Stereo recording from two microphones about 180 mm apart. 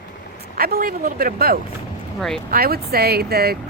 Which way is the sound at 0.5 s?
55° right (ahead or behind).